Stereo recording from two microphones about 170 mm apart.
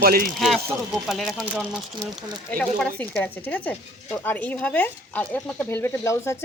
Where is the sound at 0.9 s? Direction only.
Centre (ahead or behind).